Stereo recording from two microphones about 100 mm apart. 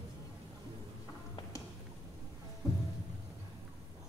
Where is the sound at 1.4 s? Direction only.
50° left (ahead or behind).